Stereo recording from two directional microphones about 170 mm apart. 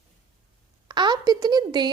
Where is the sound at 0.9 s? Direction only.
25° right (ahead or behind).